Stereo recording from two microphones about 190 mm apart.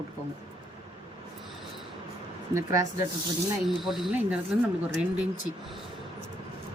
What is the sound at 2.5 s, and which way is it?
Speech, 15° right (ahead or behind).